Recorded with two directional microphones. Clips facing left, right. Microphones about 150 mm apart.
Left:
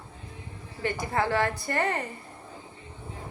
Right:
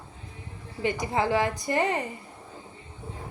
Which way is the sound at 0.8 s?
15° right (ahead or behind).